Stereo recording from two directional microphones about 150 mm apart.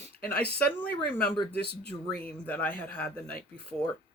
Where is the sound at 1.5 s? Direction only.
90° left.